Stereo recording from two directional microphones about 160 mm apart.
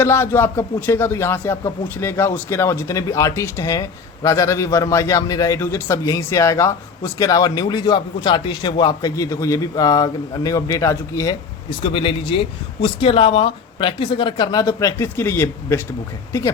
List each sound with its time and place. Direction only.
0.0 s speech: 15° left (ahead or behind)
11.8 s speech: 35° left (ahead or behind); by 15.8 s 15° left (ahead or behind)